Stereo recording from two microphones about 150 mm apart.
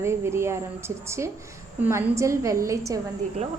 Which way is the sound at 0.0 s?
15° right (ahead or behind).